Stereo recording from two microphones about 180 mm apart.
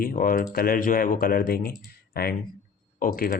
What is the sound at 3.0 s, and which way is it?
Speech, 55° left (ahead or behind).